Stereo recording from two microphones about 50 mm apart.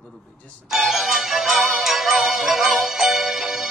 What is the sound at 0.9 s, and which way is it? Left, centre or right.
Music, centre.